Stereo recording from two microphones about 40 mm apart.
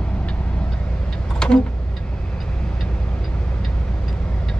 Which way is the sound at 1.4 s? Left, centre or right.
Left.